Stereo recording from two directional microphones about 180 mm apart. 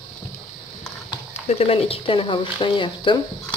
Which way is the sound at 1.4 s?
35° left (ahead or behind).